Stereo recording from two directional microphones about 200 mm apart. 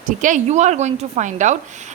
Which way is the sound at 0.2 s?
40° right (ahead or behind).